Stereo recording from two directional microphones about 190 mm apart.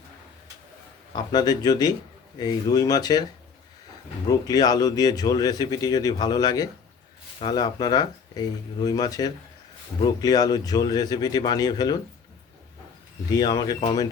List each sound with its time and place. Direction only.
1.1 s speech: 20° left (ahead or behind)
4.3 s speech: 20° left (ahead or behind)
13.3 s speech: 20° left (ahead or behind)